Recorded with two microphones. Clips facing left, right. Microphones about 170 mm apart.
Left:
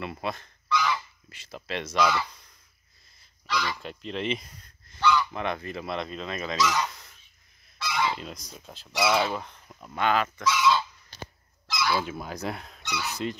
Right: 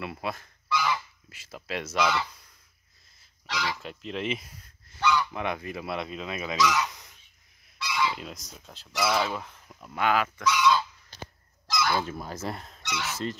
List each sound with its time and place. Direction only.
0.0 s goose: 5° right (ahead or behind)
3.4 s speech: 90° right
3.8 s speech: 5° right (ahead or behind)
6.9 s fowl: 15° right (ahead or behind)
7.8 s goose: 50° left (ahead or behind)
8.5 s speech: centre (ahead or behind)
10.4 s speech: 5° left (ahead or behind)
11.6 s goose: 45° right (ahead or behind)
12.1 s speech: centre (ahead or behind)
12.8 s speech: 80° right